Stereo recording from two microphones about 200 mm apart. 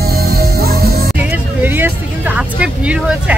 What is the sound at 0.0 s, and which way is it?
Music, 50° right (ahead or behind).